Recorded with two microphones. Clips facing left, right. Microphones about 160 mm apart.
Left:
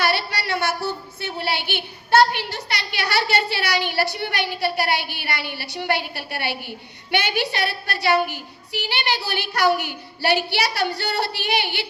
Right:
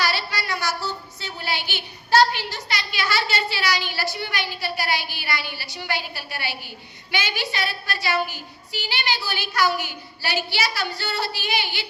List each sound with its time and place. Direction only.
0.0 s child singing: 60° left (ahead or behind)